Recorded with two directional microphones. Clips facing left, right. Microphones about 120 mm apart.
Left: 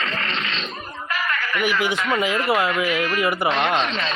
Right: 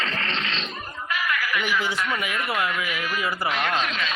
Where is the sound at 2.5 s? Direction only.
30° left (ahead or behind).